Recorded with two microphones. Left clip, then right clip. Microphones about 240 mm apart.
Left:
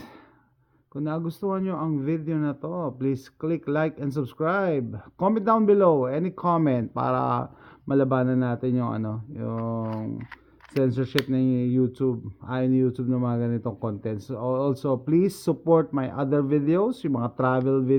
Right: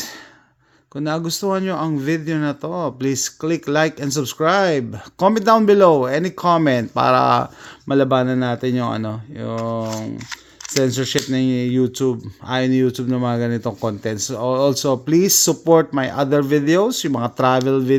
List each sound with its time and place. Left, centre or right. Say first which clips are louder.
0.9 s speech: right 8 dB; right